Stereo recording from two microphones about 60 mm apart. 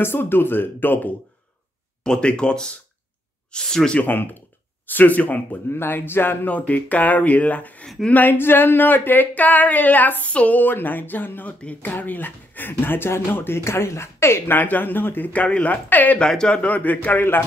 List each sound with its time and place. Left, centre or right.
0.0 s speech: left
2.0 s speech: centre
4.0 s speech: left
5.7 s speech: left
6.4 s speech: left
14.6 s speech: left
16.2 s speech: centre
16.6 s speech: left